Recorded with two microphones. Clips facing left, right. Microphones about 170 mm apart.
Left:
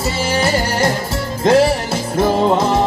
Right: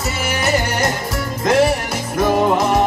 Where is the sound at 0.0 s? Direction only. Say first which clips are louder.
Left 3 dB; 30° left (ahead or behind).